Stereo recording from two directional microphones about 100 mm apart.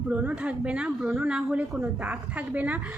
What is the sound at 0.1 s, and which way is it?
A woman's voice, 15° right (ahead or behind).